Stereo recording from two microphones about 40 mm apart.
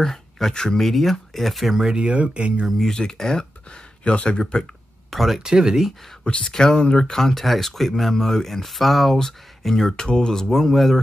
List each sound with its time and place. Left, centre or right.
0.0 s speech: centre
2.0 s speech: right
2.8 s speech: centre
4.0 s speech: left
5.1 s speech: centre
5.4 s speech: centre
6.2 s speech: left; by 11.0 s centre